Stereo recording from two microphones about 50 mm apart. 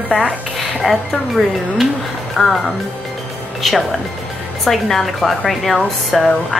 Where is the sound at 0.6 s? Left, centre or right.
Centre.